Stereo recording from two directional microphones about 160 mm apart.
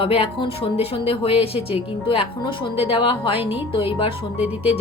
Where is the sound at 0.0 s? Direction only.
35° left (ahead or behind).